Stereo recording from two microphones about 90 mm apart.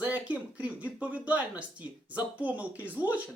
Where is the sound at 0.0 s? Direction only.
15° right (ahead or behind).